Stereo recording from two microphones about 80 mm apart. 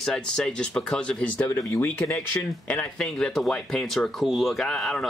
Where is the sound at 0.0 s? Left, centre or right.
Centre.